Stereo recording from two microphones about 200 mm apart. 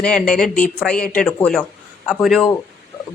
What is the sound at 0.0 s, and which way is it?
Speech, 5° left (ahead or behind).